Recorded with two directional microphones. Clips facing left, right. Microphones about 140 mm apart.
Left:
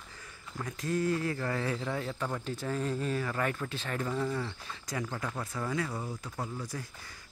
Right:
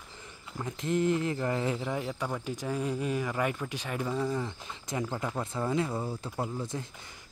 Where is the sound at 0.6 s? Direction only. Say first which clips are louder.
Right 3 dB; 20° right (ahead or behind).